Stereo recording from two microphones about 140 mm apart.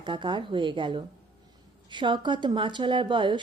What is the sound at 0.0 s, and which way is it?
Speech, 35° right (ahead or behind).